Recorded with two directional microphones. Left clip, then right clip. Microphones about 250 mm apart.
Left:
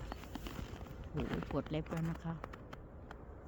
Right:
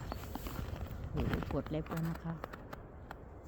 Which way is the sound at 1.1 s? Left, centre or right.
Centre.